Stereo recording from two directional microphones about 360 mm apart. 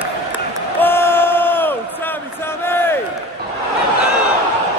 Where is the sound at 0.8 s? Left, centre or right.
Centre.